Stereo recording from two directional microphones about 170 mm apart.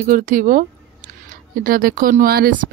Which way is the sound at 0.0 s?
50° right (ahead or behind).